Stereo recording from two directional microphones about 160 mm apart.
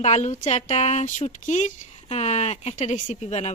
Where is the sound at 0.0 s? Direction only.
45° left (ahead or behind).